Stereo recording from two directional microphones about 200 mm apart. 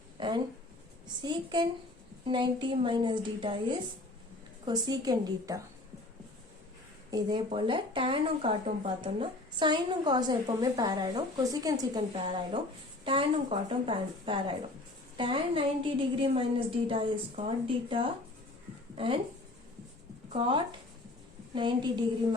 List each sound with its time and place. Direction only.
0.2 s a sound: 20° right (ahead or behind)
1.0 s speech: 20° right (ahead or behind)
7.1 s speech: 20° right (ahead or behind)
20.3 s speech: 25° right (ahead or behind)